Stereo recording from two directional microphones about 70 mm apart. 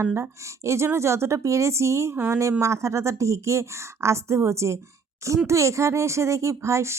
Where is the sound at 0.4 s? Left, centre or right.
Right.